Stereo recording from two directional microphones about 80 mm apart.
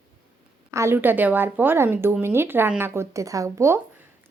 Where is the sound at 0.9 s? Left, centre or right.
Right.